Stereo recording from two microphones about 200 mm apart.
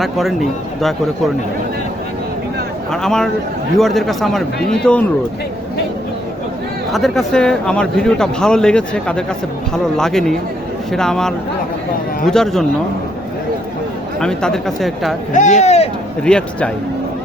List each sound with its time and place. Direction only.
0.0 s speech: centre (ahead or behind)
2.9 s speech: 5° left (ahead or behind)
6.9 s speech: centre (ahead or behind)
14.2 s speech: 5° left (ahead or behind)
15.3 s speech: 40° left (ahead or behind)
16.2 s speech: 5° left (ahead or behind)